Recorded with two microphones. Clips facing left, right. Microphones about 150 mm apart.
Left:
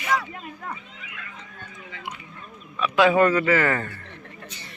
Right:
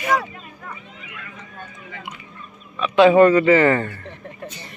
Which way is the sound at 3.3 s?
15° right (ahead or behind).